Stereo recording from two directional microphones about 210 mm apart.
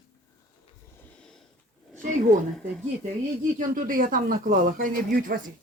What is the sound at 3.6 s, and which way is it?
Speech, 40° right (ahead or behind).